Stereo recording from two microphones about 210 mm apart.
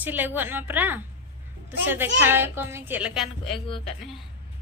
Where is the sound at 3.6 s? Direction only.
25° left (ahead or behind).